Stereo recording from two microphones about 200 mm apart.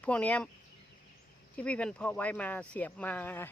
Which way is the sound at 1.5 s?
5° left (ahead or behind).